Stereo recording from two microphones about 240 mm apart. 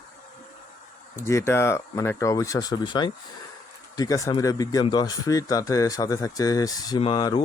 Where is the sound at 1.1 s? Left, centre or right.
Centre.